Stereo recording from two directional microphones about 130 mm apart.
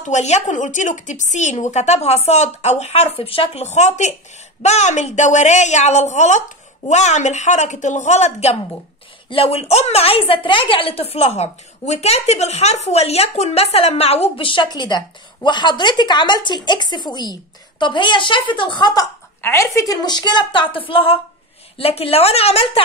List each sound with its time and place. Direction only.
0.0 s speech: 60° left (ahead or behind)
9.3 s a woman's voice: 45° left (ahead or behind)
19.4 s a woman's voice: 20° left (ahead or behind); by 22.8 s 50° left (ahead or behind)